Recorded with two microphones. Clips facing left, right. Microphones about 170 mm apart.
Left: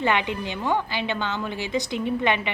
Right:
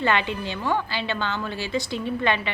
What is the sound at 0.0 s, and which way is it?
A woman's voice, 15° left (ahead or behind).